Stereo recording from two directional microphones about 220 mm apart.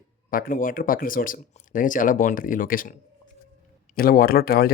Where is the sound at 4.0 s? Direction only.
40° left (ahead or behind).